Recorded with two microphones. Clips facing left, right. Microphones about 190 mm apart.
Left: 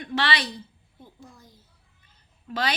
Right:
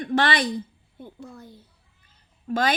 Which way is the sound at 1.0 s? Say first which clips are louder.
Right 8 dB; 65° right (ahead or behind).